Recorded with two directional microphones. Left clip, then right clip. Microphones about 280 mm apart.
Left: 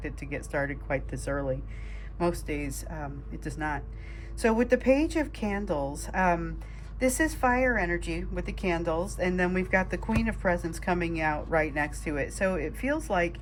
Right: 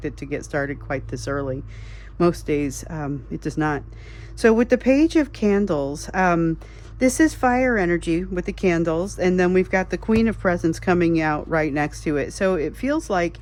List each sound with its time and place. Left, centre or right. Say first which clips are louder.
0.5 s speech: right 4 dB; centre